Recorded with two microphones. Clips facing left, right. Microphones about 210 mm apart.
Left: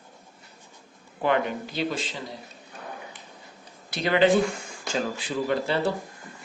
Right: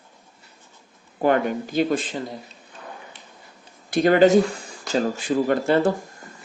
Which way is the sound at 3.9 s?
45° right (ahead or behind).